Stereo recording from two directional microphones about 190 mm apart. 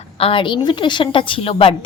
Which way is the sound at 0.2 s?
30° left (ahead or behind).